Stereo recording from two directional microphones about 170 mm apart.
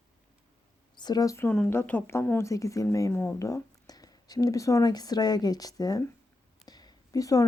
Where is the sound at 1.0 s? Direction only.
25° left (ahead or behind).